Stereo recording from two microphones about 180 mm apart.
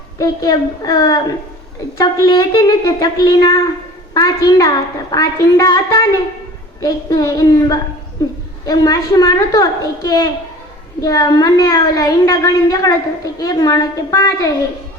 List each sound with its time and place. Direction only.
0.2 s a woman's voice: 20° left (ahead or behind)